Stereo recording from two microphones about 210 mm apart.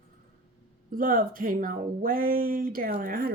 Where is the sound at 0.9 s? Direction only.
40° right (ahead or behind).